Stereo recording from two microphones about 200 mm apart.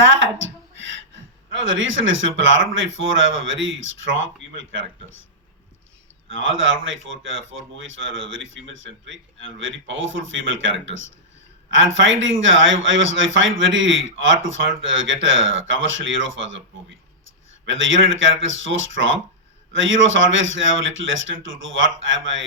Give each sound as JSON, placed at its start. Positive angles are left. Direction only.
{"t": 0.0, "sound": "a woman's voice", "side_deg": -70}
{"t": 6.3, "sound": "a man's voice", "side_deg": -70}
{"t": 17.7, "sound": "a man's voice", "side_deg": -70}